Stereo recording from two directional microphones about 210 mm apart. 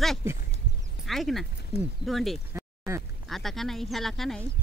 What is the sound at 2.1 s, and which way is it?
Speech, centre (ahead or behind).